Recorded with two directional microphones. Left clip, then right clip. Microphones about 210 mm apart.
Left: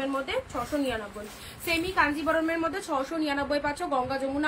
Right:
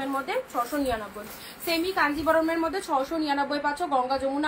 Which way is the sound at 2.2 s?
15° left (ahead or behind).